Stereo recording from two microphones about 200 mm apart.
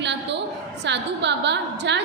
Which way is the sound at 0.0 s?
60° right (ahead or behind).